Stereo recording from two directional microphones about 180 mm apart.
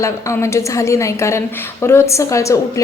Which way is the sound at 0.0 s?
15° left (ahead or behind).